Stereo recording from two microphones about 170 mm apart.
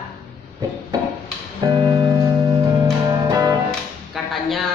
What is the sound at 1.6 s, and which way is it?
Music, 25° right (ahead or behind).